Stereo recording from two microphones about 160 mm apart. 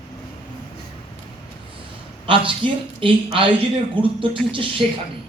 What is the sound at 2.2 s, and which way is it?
A man's voice, 30° right (ahead or behind).